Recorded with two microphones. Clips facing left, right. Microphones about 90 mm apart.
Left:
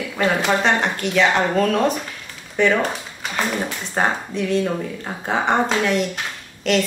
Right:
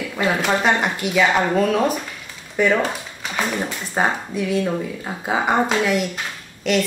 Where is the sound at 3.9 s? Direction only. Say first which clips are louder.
Even; 5° right (ahead or behind).